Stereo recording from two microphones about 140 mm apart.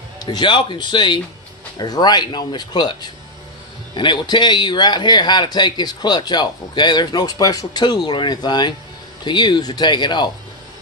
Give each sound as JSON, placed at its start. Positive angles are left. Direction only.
{"t": 0.2, "sound": "a man's voice", "side_deg": 35}